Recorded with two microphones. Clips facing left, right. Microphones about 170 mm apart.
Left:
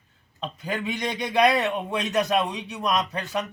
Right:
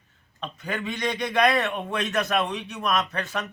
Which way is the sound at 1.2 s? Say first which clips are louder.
Left 2 dB; 15° left (ahead or behind).